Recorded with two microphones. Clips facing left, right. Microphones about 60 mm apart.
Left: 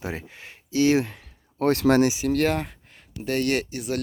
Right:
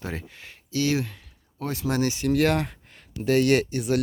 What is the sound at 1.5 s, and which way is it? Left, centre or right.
Speech, left.